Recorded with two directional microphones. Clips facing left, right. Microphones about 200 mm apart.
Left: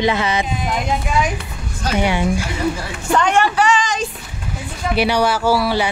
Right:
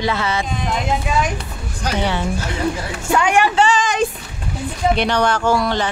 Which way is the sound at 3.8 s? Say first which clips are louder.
Right 4 dB; 55° right (ahead or behind).